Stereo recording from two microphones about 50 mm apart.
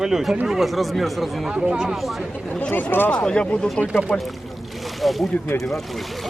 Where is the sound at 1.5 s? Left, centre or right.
Centre.